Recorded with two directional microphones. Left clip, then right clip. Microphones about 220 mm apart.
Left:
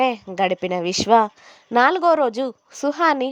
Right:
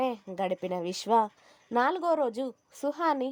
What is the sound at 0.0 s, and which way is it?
A woman's voice, 20° left (ahead or behind).